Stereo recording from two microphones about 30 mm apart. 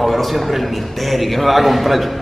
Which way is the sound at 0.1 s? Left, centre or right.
Centre.